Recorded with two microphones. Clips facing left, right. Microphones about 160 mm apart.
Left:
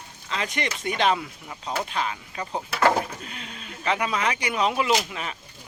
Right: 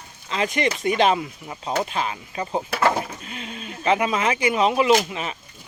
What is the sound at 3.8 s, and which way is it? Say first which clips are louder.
Speech: right 4 dB; 25° right (ahead or behind).